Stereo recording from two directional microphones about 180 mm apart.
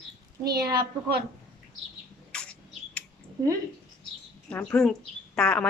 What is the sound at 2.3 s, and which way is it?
Bird, 5° left (ahead or behind).